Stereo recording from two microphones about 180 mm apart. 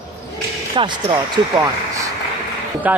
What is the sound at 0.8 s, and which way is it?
Speech, 30° right (ahead or behind).